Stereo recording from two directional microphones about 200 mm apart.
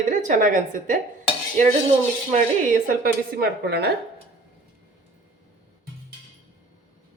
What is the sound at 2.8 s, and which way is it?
A woman's voice, 50° right (ahead or behind).